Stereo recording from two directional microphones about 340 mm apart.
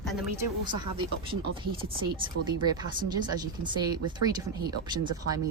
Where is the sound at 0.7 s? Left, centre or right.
Centre.